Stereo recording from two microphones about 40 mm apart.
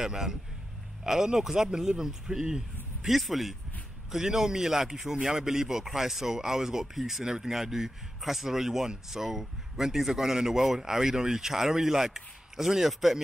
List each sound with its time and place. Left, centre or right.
0.0 s speech: centre
2.4 s a sound: centre
3.1 s speech: centre